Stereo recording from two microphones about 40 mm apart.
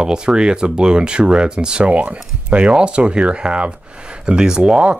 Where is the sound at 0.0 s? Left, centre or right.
Centre.